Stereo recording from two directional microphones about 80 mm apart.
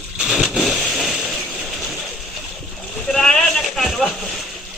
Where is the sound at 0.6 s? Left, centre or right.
Centre.